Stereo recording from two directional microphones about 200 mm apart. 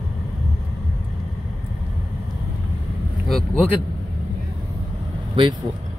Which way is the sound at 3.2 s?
Centre (ahead or behind).